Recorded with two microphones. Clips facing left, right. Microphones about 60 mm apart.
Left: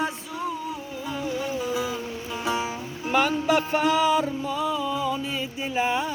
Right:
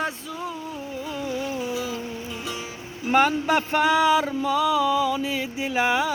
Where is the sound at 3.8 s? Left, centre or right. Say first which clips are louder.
Right 2 dB; right.